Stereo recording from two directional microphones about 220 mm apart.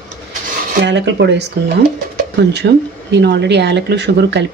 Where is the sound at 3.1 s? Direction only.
50° right (ahead or behind).